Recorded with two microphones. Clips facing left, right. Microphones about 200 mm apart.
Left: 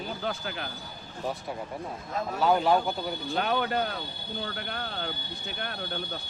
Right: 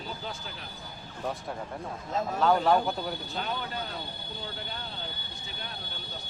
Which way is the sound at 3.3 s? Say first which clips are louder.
Left 7 dB; 65° left (ahead or behind).